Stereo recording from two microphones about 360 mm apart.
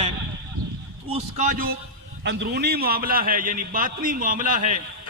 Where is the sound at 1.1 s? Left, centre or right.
Right.